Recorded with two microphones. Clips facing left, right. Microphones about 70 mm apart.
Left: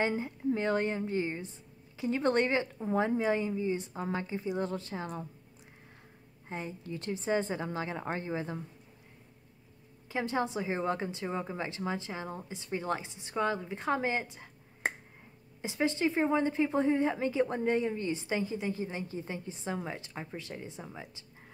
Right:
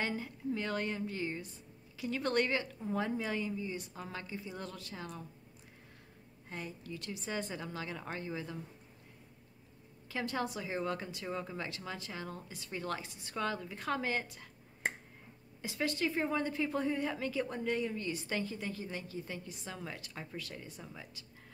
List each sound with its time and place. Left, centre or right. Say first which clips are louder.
0.0 s speech: left 6 dB; left
6.5 s speech: left 5 dB; left
10.0 s speech: left 5 dB; left